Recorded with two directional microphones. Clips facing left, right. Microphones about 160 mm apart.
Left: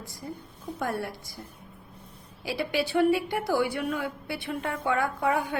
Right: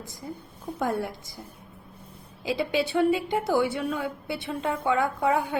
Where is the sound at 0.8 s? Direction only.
20° right (ahead or behind).